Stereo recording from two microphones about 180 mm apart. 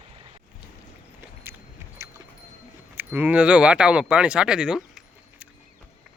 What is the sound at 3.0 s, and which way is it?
Speech, 10° right (ahead or behind).